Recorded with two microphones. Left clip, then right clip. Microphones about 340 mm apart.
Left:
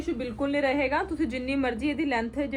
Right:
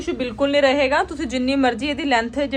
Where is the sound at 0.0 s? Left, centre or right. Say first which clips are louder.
Right 8 dB; right.